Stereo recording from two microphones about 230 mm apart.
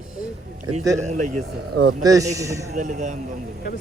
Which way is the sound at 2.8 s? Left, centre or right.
Right.